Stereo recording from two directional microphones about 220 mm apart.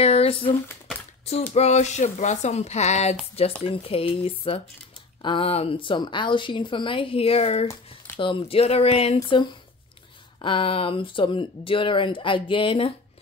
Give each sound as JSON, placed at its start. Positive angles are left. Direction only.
{"t": 0.0, "sound": "speech", "side_deg": 25}